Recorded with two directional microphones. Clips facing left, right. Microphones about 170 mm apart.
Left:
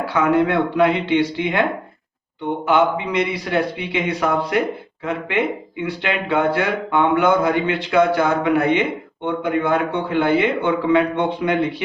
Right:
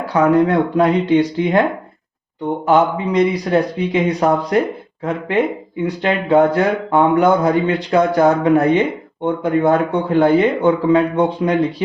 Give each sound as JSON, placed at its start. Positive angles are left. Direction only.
{"t": 0.1, "sound": "speech", "side_deg": -40}
{"t": 2.6, "sound": "speech", "side_deg": -40}